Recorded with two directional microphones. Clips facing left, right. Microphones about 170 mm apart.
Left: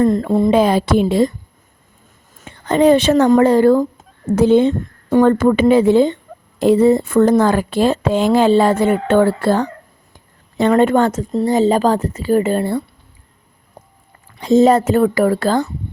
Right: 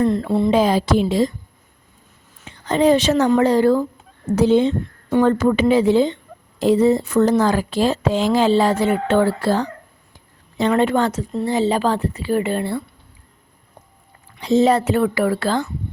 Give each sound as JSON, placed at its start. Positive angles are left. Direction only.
{"t": 0.0, "sound": "speech", "side_deg": 45}
{"t": 2.4, "sound": "speech", "side_deg": 55}
{"t": 13.8, "sound": "a sound", "side_deg": 35}
{"t": 14.3, "sound": "speech", "side_deg": 45}